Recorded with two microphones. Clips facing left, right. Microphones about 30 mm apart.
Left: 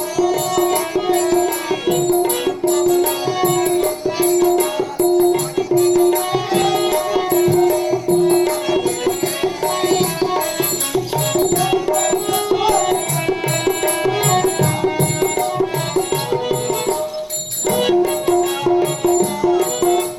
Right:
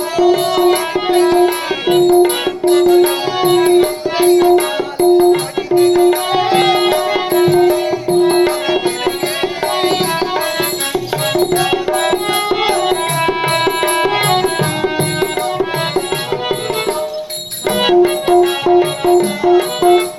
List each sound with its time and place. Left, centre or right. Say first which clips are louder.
0.2 s music: right 5 dB; right